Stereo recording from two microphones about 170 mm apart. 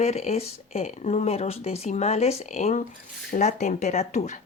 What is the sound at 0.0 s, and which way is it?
Speech, 40° left (ahead or behind).